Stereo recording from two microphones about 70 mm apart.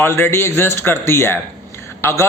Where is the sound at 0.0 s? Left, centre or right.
Left.